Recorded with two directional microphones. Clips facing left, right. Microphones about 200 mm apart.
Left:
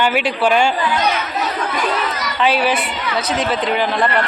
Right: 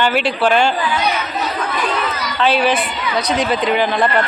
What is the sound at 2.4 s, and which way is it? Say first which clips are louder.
Speech: right 1 dB; 10° left (ahead or behind).